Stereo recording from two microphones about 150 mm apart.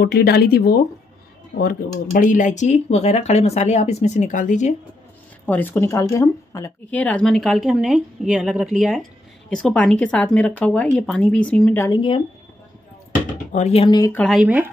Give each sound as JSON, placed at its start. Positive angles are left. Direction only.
{"t": 0.0, "sound": "speech", "side_deg": 90}
{"t": 1.6, "sound": "speech", "side_deg": 75}
{"t": 5.5, "sound": "a woman's voice", "side_deg": 15}
{"t": 11.9, "sound": "speech", "side_deg": 35}
{"t": 13.5, "sound": "speech", "side_deg": 50}
{"t": 13.8, "sound": "speech", "side_deg": 25}
{"t": 14.1, "sound": "speech", "side_deg": 5}
{"t": 14.4, "sound": "speech", "side_deg": -10}